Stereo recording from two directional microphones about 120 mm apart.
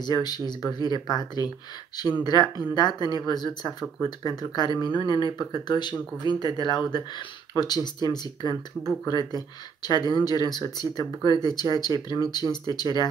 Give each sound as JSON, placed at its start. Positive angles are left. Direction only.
{"t": 0.0, "sound": "speech", "side_deg": 35}